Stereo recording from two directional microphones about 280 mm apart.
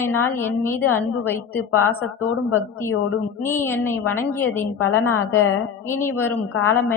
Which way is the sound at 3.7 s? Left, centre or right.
Centre.